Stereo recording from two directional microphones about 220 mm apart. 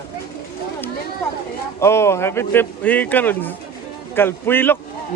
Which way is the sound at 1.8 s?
10° left (ahead or behind).